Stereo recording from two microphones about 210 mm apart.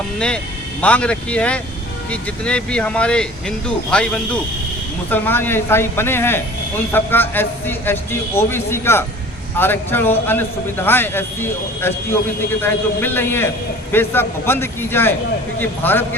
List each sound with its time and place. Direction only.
0.8 s a man's voice: 5° left (ahead or behind)